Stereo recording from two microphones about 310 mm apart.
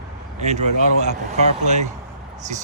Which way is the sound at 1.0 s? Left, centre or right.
Right.